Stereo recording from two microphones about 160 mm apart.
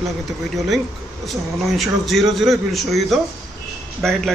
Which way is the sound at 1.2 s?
Centre (ahead or behind).